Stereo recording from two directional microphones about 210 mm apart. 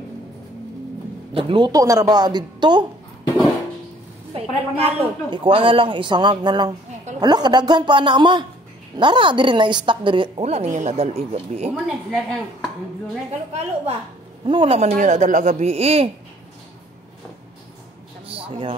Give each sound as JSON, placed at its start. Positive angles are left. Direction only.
{"t": 1.3, "sound": "a woman's voice", "side_deg": -25}
{"t": 4.3, "sound": "a woman's voice", "side_deg": -25}
{"t": 11.7, "sound": "speech", "side_deg": 0}
{"t": 13.3, "sound": "speech", "side_deg": -30}
{"t": 18.2, "sound": "a sound", "side_deg": -25}